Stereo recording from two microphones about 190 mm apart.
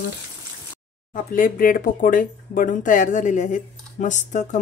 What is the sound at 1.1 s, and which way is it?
Speech, 50° left (ahead or behind).